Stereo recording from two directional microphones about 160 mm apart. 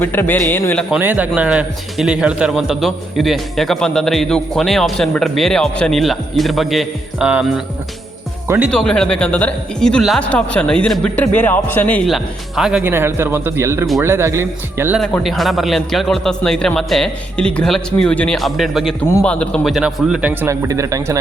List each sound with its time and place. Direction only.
0.0 s speech: 10° left (ahead or behind)
0.9 s a man's voice: 10° right (ahead or behind)
8.7 s speech: 5° left (ahead or behind)
12.8 s a man's voice: 15° right (ahead or behind)
14.9 s a man's voice: centre (ahead or behind); by 21.2 s 20° right (ahead or behind)